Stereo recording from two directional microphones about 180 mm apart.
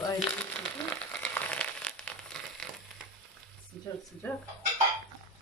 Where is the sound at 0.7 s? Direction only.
10° left (ahead or behind).